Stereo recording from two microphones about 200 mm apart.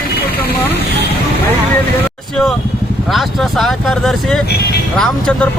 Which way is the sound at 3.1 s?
Centre (ahead or behind).